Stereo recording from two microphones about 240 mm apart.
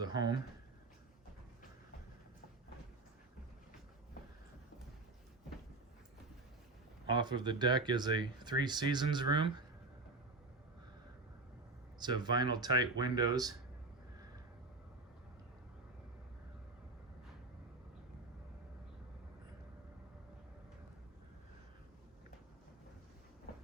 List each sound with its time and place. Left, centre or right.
0.0 s speech: centre
7.1 s speech: centre
11.9 s speech: centre